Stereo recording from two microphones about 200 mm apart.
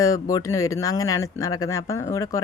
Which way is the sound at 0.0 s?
15° left (ahead or behind).